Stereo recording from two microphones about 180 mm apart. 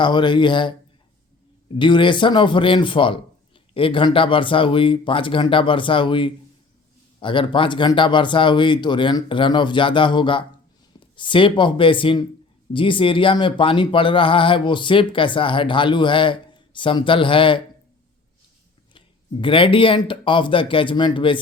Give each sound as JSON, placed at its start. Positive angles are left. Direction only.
{"t": 0.0, "sound": "speech", "side_deg": 25}
{"t": 1.8, "sound": "speech", "side_deg": 25}
{"t": 18.9, "sound": "speech", "side_deg": 30}